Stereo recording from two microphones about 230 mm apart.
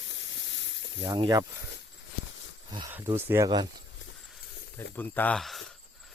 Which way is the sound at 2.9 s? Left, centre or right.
Centre.